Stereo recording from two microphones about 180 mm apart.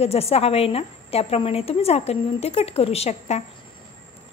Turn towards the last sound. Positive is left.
turn(degrees=35)  # may be behind; listen again after turning